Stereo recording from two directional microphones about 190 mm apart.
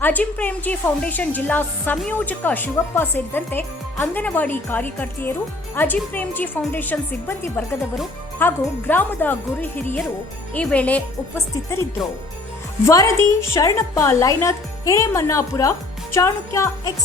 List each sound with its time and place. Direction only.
0.0 s speech: 10° left (ahead or behind)
12.8 s speech: 15° left (ahead or behind)